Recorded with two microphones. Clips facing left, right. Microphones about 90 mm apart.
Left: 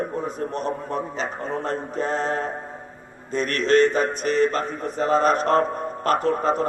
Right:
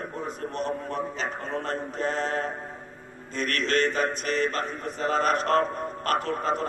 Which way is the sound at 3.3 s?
25° left (ahead or behind).